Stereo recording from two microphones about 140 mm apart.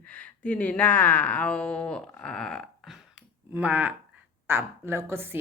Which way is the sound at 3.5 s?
10° right (ahead or behind).